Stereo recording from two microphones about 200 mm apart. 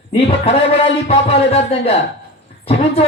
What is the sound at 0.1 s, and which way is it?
Speech, 30° left (ahead or behind).